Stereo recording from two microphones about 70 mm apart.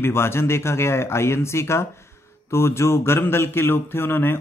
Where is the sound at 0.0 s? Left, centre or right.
Left.